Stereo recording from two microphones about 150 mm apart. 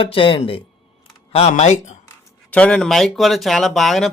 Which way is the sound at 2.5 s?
5° left (ahead or behind).